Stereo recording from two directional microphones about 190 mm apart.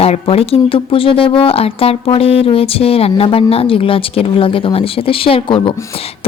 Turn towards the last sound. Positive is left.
turn(degrees=25)  # may be behind; listen again after turning